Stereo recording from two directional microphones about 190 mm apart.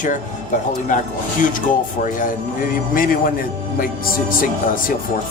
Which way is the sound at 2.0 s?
45° left (ahead or behind).